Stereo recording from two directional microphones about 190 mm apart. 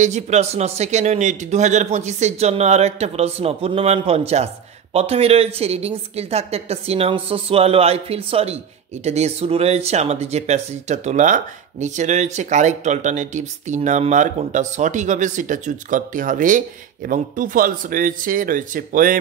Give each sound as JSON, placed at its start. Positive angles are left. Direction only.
{"t": 0.0, "sound": "speech", "side_deg": -35}